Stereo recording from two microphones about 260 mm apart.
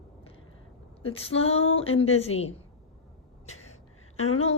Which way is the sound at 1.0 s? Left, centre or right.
Left.